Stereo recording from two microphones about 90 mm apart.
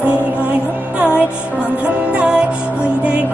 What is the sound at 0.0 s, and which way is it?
Music, 15° right (ahead or behind).